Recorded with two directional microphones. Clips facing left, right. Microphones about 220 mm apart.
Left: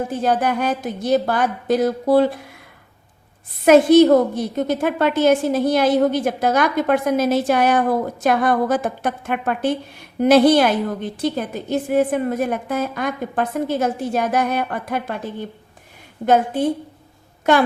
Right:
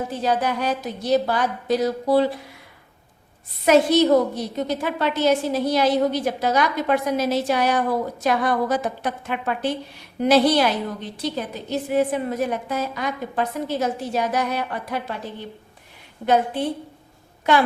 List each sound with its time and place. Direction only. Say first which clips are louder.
0.1 s a woman's voice: left 3 dB; 50° left (ahead or behind)
3.7 s a woman's voice: left 5 dB; 50° left (ahead or behind)